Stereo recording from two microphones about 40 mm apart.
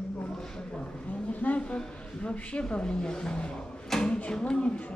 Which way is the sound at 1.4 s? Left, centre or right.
Left.